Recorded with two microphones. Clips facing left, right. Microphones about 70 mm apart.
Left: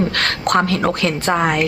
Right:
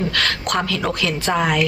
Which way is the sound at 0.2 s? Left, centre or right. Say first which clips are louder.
Left 4 dB; left.